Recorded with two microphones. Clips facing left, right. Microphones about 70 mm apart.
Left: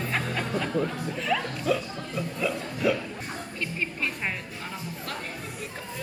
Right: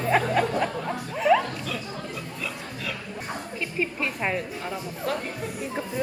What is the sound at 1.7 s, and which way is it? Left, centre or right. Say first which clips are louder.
Speech: left 7 dB; centre.